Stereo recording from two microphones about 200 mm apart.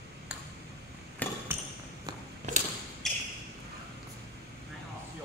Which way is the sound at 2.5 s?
35° right (ahead or behind).